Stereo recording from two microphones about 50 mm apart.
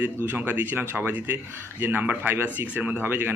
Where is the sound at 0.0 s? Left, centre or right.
Right.